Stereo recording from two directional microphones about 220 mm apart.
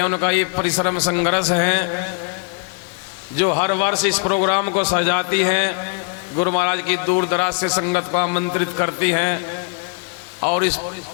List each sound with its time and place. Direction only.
0.0 s a man's voice: 20° left (ahead or behind)
3.4 s a man's voice: 20° left (ahead or behind)
10.4 s a man's voice: 20° left (ahead or behind)